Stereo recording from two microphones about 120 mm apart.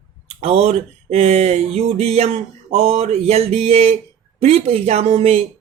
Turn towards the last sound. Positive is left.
turn(degrees=-55)  # may be behind; listen again after turning